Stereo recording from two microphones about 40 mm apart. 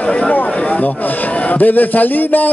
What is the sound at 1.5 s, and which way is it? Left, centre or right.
Speech, left.